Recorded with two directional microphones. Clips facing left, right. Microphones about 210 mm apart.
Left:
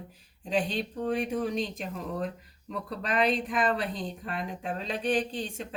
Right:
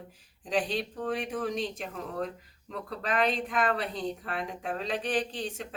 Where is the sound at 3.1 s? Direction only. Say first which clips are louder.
Left 1 dB; centre (ahead or behind).